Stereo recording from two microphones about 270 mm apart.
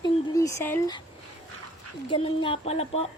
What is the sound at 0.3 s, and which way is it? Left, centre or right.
Speech, centre.